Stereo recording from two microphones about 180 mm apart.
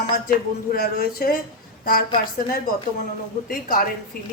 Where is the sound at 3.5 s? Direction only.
50° left (ahead or behind).